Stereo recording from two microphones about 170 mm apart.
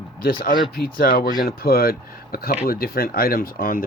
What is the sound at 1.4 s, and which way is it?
Speech, 65° left (ahead or behind).